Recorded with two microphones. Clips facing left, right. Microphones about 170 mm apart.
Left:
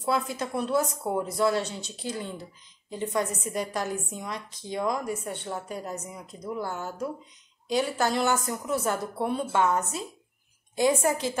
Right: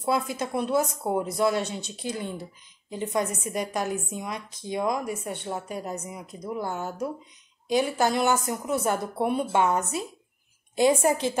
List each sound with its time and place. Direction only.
0.0 s a woman's voice: 20° right (ahead or behind)